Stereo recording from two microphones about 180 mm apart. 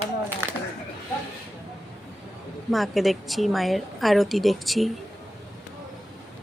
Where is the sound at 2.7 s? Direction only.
Centre (ahead or behind).